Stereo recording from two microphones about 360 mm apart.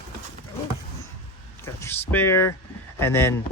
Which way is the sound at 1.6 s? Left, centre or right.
Centre.